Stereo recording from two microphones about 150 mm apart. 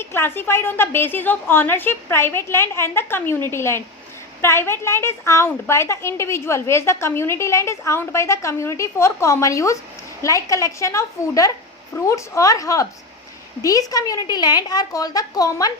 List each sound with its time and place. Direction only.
0.0 s a woman's voice: 15° left (ahead or behind)